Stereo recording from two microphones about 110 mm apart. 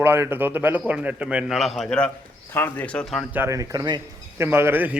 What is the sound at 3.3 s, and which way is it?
Speech, 20° right (ahead or behind).